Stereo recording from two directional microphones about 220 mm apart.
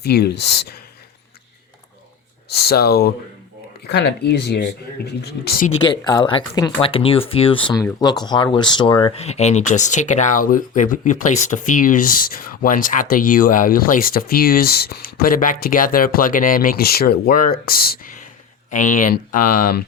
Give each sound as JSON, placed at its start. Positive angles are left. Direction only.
{"t": 0.0, "sound": "speech", "side_deg": 45}
{"t": 2.5, "sound": "speech", "side_deg": 45}
{"t": 6.1, "sound": "speech", "side_deg": 20}